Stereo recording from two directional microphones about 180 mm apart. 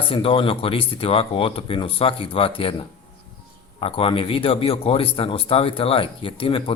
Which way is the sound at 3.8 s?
30° left (ahead or behind).